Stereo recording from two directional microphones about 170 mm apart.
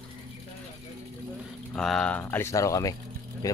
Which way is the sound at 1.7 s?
5° left (ahead or behind).